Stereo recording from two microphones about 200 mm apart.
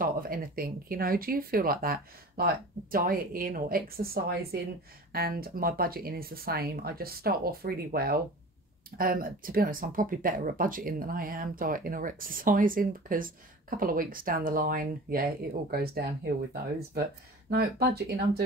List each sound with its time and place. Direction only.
0.0 s speech: 45° right (ahead or behind)
17.5 s speech: 50° right (ahead or behind)